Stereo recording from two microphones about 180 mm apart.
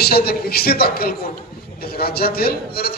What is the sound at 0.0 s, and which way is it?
A man's voice, 60° left (ahead or behind).